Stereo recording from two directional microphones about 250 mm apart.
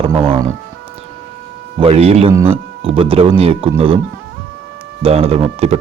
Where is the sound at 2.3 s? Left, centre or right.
Centre.